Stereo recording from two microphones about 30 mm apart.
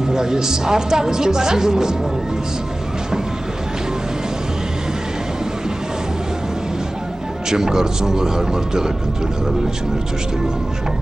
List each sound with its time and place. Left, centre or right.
0.1 s a woman's voice: centre
7.4 s a woman's voice: centre